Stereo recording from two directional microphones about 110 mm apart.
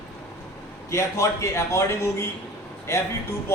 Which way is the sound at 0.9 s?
25° left (ahead or behind).